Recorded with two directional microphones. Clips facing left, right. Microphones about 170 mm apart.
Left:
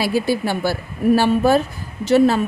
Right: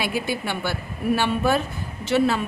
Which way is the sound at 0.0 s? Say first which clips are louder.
Left 7 dB; 35° left (ahead or behind).